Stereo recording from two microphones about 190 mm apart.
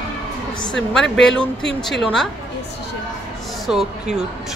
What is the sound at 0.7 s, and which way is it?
A woman's voice, centre (ahead or behind).